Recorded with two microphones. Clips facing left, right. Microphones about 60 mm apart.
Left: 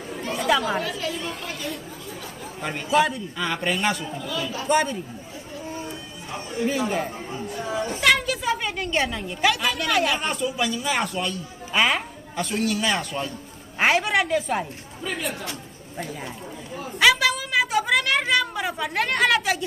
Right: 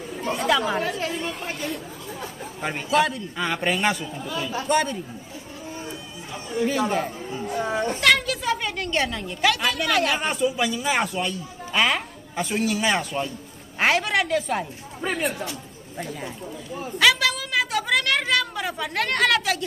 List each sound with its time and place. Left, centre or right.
0.7 s a woman's voice: right
2.6 s a man's voice: centre
3.3 s speech: centre
4.3 s speech: right
4.6 s a woman's voice: centre
6.6 s a man's voice: centre
7.4 s a sound: right
8.0 s a woman's voice: centre
13.7 s a woman's voice: centre
15.0 s a woman's voice: right
17.0 s a sound: centre